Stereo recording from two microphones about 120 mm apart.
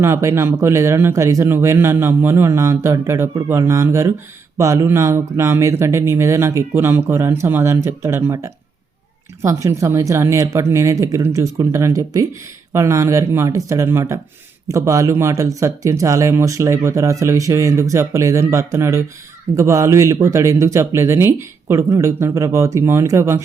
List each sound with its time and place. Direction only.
0.0 s speech: 25° right (ahead or behind)